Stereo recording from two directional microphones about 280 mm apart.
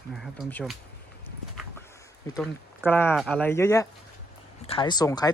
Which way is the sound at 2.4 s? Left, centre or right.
Centre.